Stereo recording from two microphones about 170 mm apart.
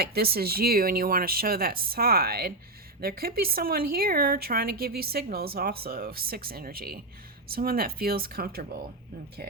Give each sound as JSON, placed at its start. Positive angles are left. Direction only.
{"t": 0.0, "sound": "speech", "side_deg": -65}